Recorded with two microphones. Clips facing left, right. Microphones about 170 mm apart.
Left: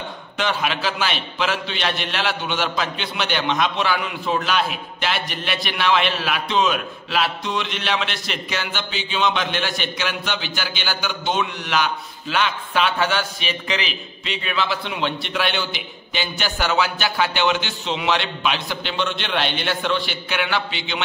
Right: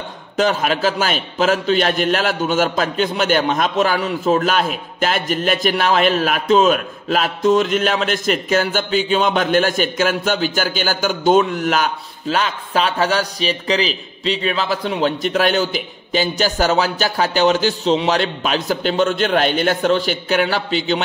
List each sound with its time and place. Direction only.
0.4 s a man's voice: 45° right (ahead or behind)